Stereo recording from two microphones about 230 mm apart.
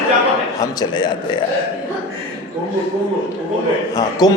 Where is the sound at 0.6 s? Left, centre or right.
Centre.